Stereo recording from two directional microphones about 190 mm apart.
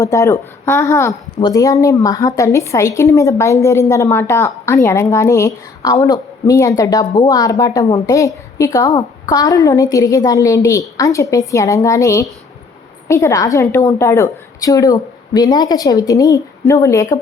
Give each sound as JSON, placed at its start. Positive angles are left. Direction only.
{"t": 0.0, "sound": "a woman's voice", "side_deg": 15}